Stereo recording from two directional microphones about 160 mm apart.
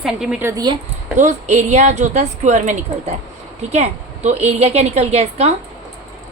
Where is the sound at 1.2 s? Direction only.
45° right (ahead or behind).